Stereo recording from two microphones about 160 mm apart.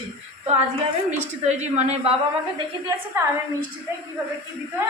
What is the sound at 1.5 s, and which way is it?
Speech, 45° right (ahead or behind).